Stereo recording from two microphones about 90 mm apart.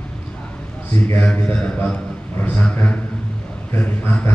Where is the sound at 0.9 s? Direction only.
20° left (ahead or behind).